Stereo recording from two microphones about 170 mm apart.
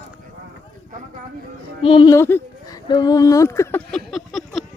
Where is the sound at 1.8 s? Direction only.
30° left (ahead or behind).